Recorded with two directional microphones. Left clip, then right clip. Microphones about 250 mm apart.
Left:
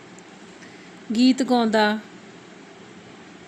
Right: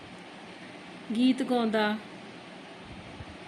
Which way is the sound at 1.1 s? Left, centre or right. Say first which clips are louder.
Left 7 dB; left.